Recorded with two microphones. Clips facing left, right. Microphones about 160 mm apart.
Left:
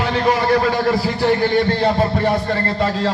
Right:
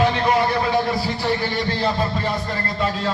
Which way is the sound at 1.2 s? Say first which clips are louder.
Left 7 dB; 50° left (ahead or behind).